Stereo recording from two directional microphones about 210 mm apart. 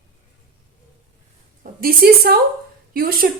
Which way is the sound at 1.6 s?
45° right (ahead or behind).